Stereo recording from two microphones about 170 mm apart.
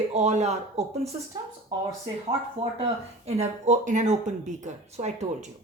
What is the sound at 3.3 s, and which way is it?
Speech, 40° right (ahead or behind).